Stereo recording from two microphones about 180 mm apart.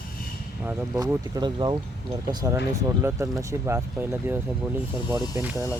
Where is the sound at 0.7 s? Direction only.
15° right (ahead or behind).